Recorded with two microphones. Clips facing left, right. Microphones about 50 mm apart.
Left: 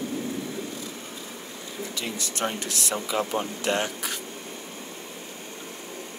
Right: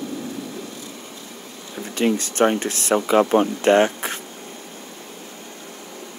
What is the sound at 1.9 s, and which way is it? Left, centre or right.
Speech, right.